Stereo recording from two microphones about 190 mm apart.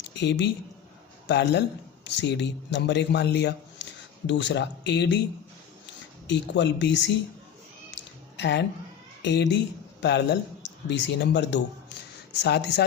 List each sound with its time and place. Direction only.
0.0 s a woman's voice: 65° left (ahead or behind)
8.4 s a man's voice: 65° left (ahead or behind)